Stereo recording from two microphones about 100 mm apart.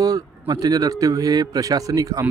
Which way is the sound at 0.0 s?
40° right (ahead or behind).